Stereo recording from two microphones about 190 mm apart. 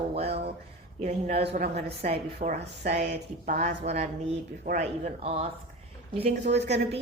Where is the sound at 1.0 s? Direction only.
30° right (ahead or behind).